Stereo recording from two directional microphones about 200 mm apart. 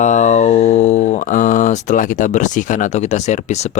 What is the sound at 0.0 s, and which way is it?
Speech, 35° left (ahead or behind).